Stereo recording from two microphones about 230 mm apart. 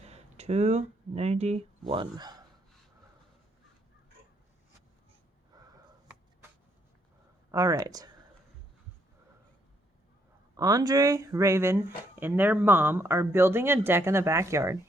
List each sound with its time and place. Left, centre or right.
0.0 s speech: right
5.5 s sniff: centre
7.5 s speech: centre
10.6 s speech: centre